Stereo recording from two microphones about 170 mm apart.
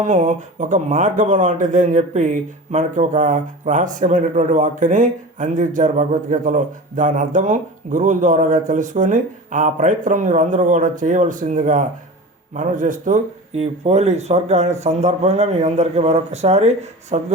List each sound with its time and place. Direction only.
0.0 s speech: 45° right (ahead or behind)